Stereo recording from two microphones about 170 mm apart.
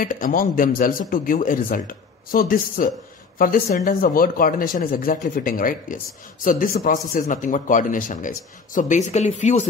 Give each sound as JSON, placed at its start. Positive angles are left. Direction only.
{"t": 0.0, "sound": "speech", "side_deg": 55}